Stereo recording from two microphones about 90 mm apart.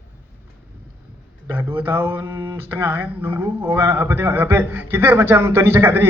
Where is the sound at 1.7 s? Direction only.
25° right (ahead or behind).